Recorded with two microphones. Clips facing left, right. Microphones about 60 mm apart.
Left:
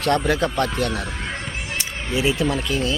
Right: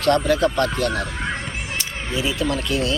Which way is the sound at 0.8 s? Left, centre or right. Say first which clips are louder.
Right 2 dB; right.